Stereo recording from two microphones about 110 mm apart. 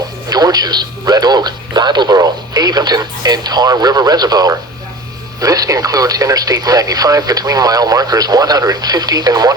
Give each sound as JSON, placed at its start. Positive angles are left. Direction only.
{"t": 0.3, "sound": "a man's voice", "side_deg": -35}